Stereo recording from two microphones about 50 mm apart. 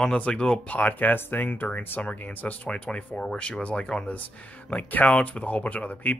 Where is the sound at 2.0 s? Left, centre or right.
Left.